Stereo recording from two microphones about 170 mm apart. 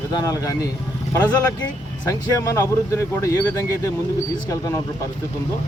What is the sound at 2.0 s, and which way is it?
Speech, 20° left (ahead or behind).